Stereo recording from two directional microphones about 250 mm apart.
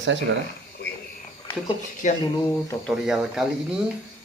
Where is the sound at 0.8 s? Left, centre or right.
Left.